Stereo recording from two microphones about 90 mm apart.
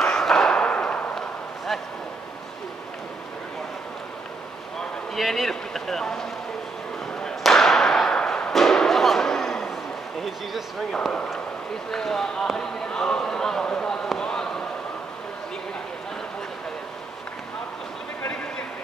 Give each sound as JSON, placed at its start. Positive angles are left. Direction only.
{"t": 0.0, "sound": "thump", "side_deg": 5}
{"t": 5.1, "sound": "speech", "side_deg": 0}
{"t": 7.2, "sound": "thump", "side_deg": 5}
{"t": 10.2, "sound": "speech", "side_deg": 0}
{"t": 14.0, "sound": "basketball bounce", "side_deg": 5}